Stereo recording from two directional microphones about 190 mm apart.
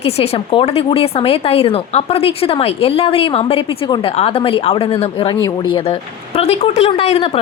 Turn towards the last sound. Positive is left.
turn(degrees=30)  # may be behind; listen again after turning